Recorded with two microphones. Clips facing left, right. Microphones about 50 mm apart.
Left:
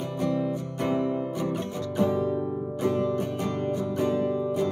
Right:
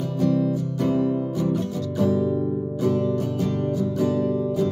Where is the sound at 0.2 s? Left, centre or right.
Left.